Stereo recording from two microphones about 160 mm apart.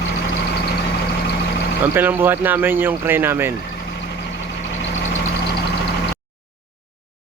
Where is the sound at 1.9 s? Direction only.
15° right (ahead or behind).